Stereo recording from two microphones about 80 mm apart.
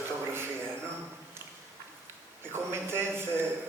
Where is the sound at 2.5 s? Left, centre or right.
Right.